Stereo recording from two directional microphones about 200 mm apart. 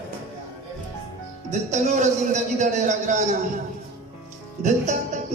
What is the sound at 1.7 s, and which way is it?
A man's voice, 35° right (ahead or behind).